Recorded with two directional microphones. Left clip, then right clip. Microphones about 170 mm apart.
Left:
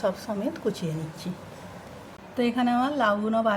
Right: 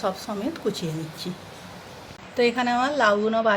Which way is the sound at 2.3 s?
30° right (ahead or behind).